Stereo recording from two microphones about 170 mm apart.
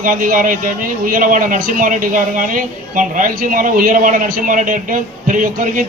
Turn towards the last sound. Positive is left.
turn(degrees=-50)  # may be behind; listen again after turning